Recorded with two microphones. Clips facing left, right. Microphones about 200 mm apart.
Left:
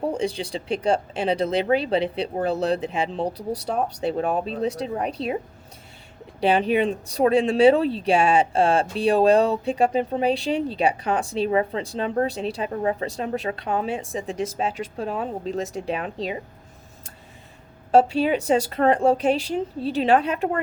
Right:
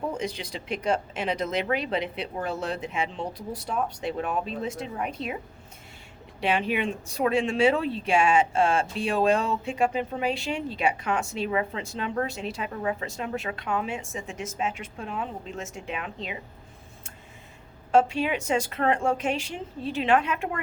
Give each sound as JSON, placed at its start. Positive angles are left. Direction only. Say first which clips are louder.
{"t": 0.0, "sound": "speech", "louder": "left 6 dB", "side_deg": 35}
{"t": 6.4, "sound": "speech", "louder": "left 6 dB", "side_deg": 35}
{"t": 17.9, "sound": "speech", "louder": "left 4 dB", "side_deg": 35}